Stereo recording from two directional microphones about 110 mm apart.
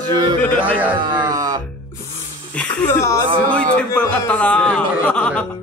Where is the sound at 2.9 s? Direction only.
25° left (ahead or behind).